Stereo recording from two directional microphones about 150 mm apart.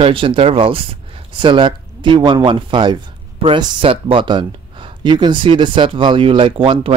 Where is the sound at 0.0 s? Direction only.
35° right (ahead or behind).